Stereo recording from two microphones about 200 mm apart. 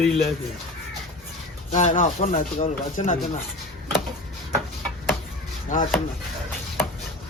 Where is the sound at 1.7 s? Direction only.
40° left (ahead or behind).